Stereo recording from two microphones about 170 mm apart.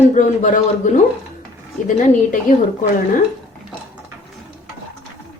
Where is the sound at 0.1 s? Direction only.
50° left (ahead or behind).